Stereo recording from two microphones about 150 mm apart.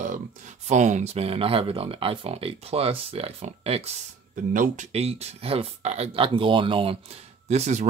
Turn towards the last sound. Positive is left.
turn(degrees=-50)  # may be behind; listen again after turning